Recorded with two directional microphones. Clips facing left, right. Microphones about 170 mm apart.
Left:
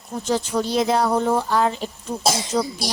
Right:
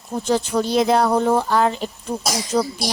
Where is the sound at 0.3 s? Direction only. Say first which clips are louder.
Right 2 dB; 60° right (ahead or behind).